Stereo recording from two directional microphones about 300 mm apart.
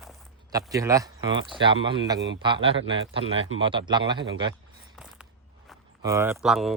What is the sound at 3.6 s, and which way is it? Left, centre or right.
Speech, centre.